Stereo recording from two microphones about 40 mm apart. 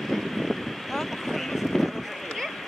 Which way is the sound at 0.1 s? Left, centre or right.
Centre.